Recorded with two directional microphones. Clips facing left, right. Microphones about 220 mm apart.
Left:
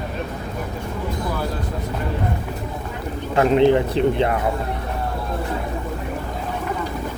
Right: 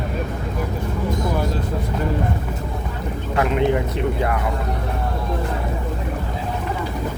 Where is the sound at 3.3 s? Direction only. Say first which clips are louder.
Left 5 dB; 30° left (ahead or behind).